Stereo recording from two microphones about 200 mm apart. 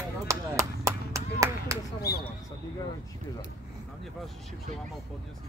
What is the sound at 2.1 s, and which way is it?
Speech, 50° left (ahead or behind).